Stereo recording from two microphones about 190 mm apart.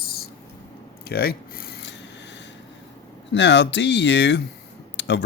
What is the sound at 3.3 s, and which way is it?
Speech, 70° left (ahead or behind).